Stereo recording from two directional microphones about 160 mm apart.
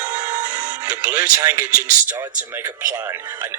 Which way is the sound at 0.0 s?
25° right (ahead or behind).